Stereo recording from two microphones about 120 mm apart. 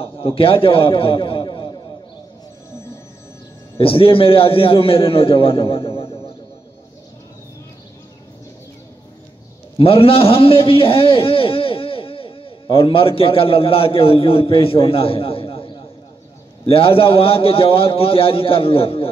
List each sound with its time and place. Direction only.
0.0 s a man's voice: 50° left (ahead or behind)
3.7 s a man's voice: 50° left (ahead or behind)
9.8 s a man's voice: 50° left (ahead or behind)